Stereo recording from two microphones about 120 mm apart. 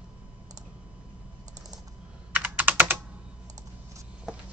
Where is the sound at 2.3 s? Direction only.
15° right (ahead or behind).